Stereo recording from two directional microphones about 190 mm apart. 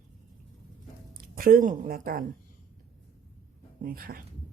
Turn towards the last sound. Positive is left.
turn(degrees=-50)  # may be behind; listen again after turning